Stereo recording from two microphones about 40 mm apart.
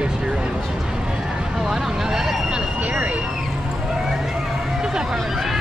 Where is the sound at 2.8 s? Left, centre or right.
Right.